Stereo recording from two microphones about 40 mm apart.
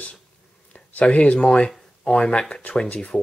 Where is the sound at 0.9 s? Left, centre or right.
Left.